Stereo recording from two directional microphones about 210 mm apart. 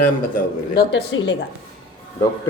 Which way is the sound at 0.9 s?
60° left (ahead or behind).